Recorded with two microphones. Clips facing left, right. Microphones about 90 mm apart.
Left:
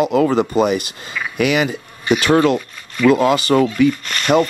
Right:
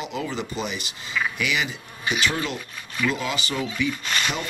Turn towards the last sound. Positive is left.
turn(degrees=-10)  # may be behind; listen again after turning